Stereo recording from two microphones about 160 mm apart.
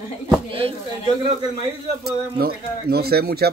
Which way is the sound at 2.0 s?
75° right (ahead or behind).